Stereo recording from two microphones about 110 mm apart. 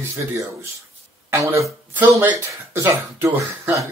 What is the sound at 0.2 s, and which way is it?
Speech, 25° right (ahead or behind).